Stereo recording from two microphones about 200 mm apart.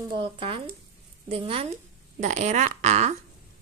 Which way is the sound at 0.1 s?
25° right (ahead or behind).